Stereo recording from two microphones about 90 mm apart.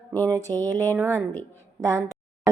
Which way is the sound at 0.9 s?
25° right (ahead or behind).